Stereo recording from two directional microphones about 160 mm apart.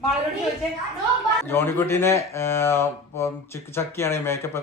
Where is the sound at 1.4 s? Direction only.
15° left (ahead or behind).